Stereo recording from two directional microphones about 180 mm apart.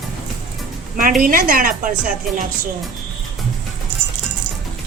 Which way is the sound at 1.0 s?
50° right (ahead or behind).